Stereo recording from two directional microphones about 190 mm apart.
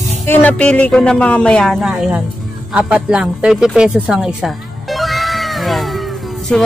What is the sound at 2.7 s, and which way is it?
Music, 5° right (ahead or behind).